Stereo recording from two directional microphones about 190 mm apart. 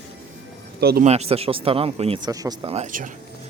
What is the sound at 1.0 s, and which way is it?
A man's voice, 35° right (ahead or behind).